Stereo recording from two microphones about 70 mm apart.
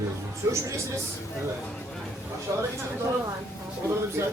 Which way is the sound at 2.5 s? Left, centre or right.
Right.